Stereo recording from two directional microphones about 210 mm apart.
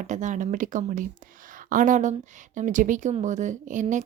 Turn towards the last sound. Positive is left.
turn(degrees=-35)  # may be behind; listen again after turning